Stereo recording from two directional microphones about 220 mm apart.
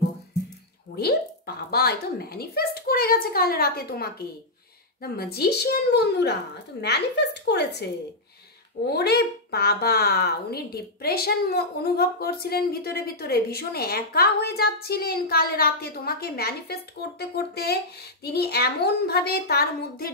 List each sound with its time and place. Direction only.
0.9 s speech: 45° left (ahead or behind)